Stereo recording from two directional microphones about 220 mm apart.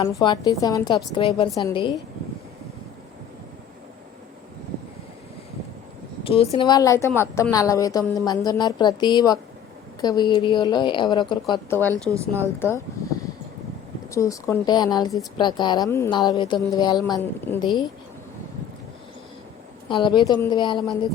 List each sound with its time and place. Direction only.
0.0 s a woman's voice: 20° left (ahead or behind)
6.2 s speech: 25° left (ahead or behind)
6.7 s a woman's voice: 15° left (ahead or behind)
11.5 s a woman's voice: 10° left (ahead or behind)
12.1 s a woman's voice: 10° right (ahead or behind)
12.5 s a woman's voice: 10° left (ahead or behind)
14.1 s a woman's voice: 15° left (ahead or behind)
19.9 s a woman's voice: 20° left (ahead or behind)